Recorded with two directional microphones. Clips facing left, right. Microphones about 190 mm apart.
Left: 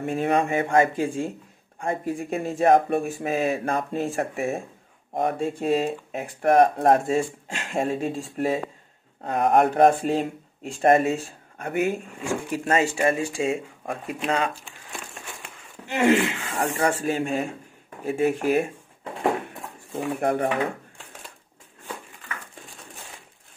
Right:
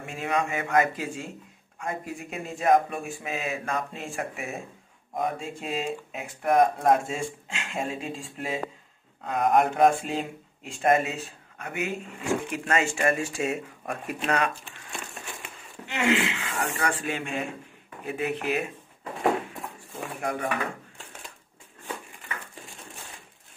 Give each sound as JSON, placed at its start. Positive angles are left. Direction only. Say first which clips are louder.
{"t": 0.0, "sound": "speech", "louder": "left 6 dB", "side_deg": 35}
{"t": 6.5, "sound": "speech", "louder": "left 3 dB", "side_deg": 60}
{"t": 7.1, "sound": "speech", "louder": "left 8 dB", "side_deg": 40}
{"t": 11.7, "sound": "speech", "louder": "left 7 dB", "side_deg": 50}
{"t": 12.3, "sound": "speech", "louder": "left 2 dB", "side_deg": 30}
{"t": 15.9, "sound": "speech", "louder": "left 5 dB", "side_deg": 45}
{"t": 20.2, "sound": "speech", "louder": "left 7 dB", "side_deg": 35}
{"t": 20.4, "sound": "speech", "louder": "left 5 dB", "side_deg": 25}